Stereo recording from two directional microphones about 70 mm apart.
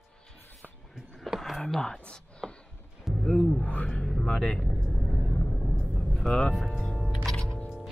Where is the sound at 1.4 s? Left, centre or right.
Centre.